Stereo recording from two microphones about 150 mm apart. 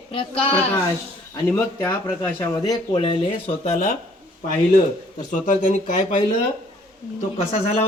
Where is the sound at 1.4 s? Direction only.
15° left (ahead or behind).